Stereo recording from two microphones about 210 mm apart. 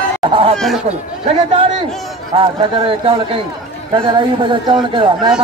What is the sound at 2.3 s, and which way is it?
A man's voice, 25° right (ahead or behind).